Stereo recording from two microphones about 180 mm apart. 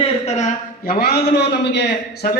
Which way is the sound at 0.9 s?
60° left (ahead or behind).